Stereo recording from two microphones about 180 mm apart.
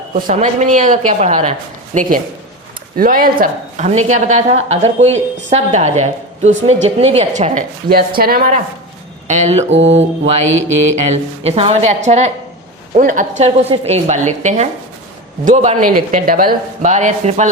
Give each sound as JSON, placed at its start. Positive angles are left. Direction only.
{"t": 0.1, "sound": "a woman's voice", "side_deg": -40}
{"t": 2.0, "sound": "a man's voice", "side_deg": -50}
{"t": 9.2, "sound": "a woman's voice", "side_deg": -40}
{"t": 9.7, "sound": "mantra", "side_deg": -90}
{"t": 10.8, "sound": "a woman's voice", "side_deg": -40}